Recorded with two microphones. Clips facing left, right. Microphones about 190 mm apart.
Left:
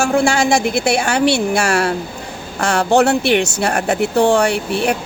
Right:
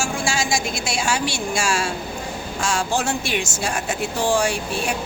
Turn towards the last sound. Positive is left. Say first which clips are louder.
# left 7 dB
turn(degrees=65)  # may be behind; listen again after turning